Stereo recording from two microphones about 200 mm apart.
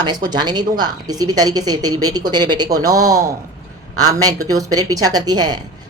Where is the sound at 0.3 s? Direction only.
20° right (ahead or behind).